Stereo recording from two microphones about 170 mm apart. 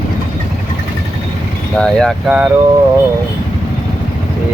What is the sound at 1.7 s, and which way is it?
Speech, 5° left (ahead or behind).